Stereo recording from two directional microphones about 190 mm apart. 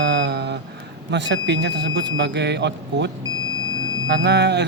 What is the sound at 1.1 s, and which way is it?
A man's voice, 65° right (ahead or behind).